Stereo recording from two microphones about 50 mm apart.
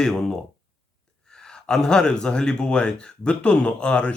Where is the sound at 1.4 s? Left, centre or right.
Centre.